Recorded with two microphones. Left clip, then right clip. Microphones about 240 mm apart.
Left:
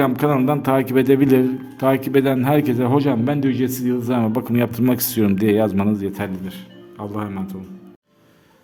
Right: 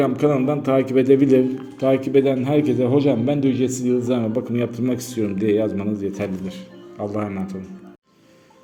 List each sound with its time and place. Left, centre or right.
0.0 s a man's voice: left